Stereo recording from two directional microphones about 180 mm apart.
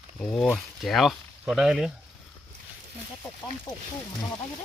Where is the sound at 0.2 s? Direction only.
5° left (ahead or behind).